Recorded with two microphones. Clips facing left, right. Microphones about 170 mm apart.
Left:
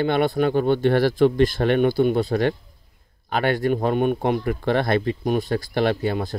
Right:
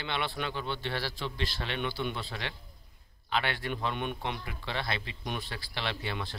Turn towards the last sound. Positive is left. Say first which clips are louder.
# left 13 dB
turn(degrees=40)  # may be behind; listen again after turning